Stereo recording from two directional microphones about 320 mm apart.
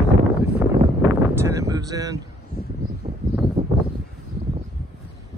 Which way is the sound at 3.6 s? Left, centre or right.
Centre.